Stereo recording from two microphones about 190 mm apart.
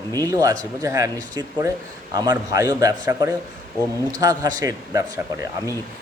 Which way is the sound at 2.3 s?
15° right (ahead or behind).